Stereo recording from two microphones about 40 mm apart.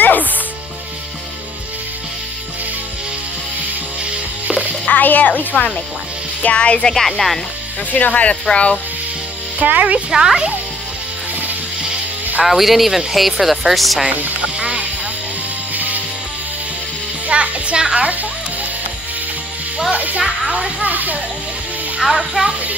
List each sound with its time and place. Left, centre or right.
0.0 s music: left
4.8 s music: left
6.4 s speech: left
6.9 s speech: centre
7.9 s speech: left
9.6 s speech: right
10.1 s a child's voice: centre
12.4 s speech: centre
14.0 s speech: right
14.6 s speech: right
15.7 s music: right
17.3 s a child's voice: right
19.9 s speech: right
22.0 s a child's voice: centre